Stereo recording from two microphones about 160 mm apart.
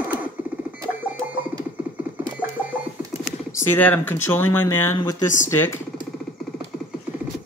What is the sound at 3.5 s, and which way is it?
Speech, 15° left (ahead or behind).